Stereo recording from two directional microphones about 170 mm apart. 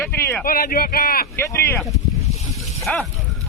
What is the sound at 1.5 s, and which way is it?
Speech, 15° left (ahead or behind).